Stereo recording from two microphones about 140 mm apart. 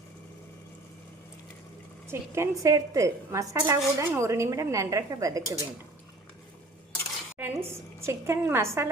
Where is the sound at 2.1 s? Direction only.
20° right (ahead or behind).